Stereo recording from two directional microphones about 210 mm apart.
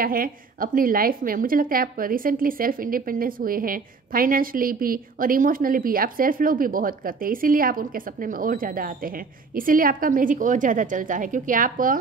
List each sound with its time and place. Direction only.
0.0 s a woman's voice: 45° right (ahead or behind)